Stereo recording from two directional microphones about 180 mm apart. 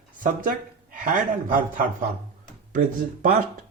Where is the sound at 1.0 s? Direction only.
50° right (ahead or behind).